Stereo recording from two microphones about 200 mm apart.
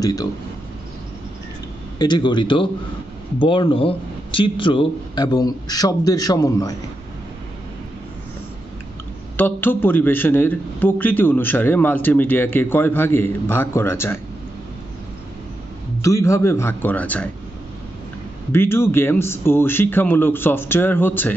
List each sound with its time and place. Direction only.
0.0 s speech: 20° left (ahead or behind)
2.0 s a man's voice: 20° left (ahead or behind)
9.4 s a man's voice: 10° left (ahead or behind)
16.0 s a man's voice: 15° left (ahead or behind)
18.5 s a man's voice: 10° left (ahead or behind)